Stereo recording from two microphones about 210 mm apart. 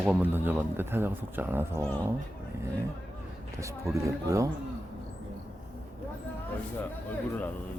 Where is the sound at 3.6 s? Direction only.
15° right (ahead or behind).